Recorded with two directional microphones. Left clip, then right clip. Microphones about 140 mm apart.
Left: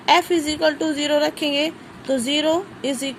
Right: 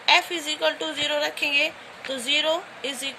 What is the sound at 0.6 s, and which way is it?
A woman's voice, 40° left (ahead or behind).